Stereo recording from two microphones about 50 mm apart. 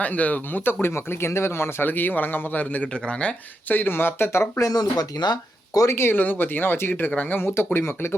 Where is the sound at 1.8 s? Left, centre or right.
Left.